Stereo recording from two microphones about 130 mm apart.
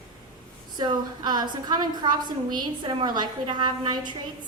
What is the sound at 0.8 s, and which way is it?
A woman's voice, 35° right (ahead or behind).